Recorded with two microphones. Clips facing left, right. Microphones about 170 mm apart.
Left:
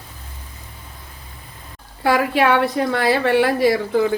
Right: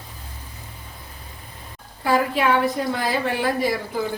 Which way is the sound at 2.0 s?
75° left (ahead or behind).